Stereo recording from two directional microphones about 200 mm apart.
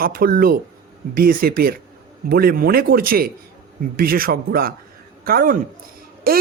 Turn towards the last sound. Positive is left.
turn(degrees=-50)  # may be behind; listen again after turning